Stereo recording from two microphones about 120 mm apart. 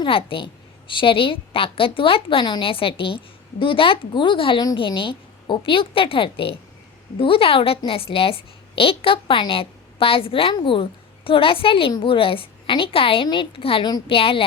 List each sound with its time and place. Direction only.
0.0 s a woman's voice: 45° left (ahead or behind)